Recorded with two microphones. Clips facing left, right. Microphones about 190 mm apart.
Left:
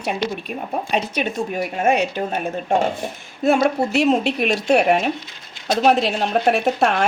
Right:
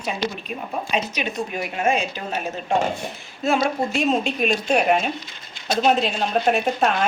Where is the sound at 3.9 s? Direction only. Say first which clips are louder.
Left 4 dB; 70° left (ahead or behind).